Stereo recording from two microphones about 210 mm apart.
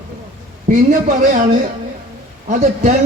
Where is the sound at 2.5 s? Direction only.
35° right (ahead or behind).